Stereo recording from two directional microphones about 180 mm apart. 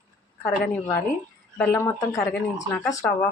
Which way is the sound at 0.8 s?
15° left (ahead or behind).